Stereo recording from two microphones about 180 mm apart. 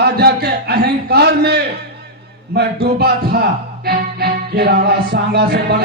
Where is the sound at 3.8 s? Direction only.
60° right (ahead or behind).